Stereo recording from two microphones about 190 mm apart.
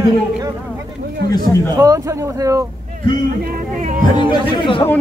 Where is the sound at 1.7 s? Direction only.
15° right (ahead or behind).